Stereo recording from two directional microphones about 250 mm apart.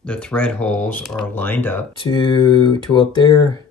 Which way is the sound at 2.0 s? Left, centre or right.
Centre.